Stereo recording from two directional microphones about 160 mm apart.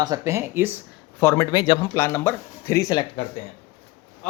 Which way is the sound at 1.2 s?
15° left (ahead or behind).